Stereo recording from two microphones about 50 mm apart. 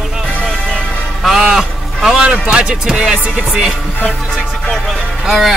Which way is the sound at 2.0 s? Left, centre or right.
Centre.